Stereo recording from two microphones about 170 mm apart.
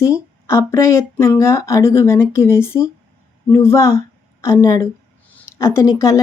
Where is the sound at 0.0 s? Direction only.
15° left (ahead or behind).